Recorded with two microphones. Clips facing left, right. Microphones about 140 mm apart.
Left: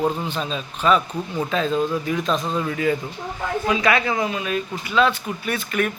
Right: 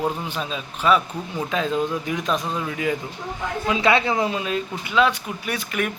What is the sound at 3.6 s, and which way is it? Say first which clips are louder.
Speech: right 1 dB; 25° right (ahead or behind).